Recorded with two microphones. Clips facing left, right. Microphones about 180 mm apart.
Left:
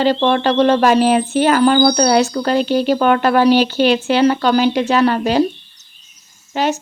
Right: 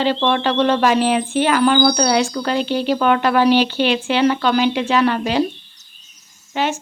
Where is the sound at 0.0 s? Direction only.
40° left (ahead or behind).